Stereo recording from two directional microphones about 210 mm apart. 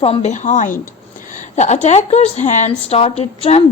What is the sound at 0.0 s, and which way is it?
A woman's voice, 30° left (ahead or behind).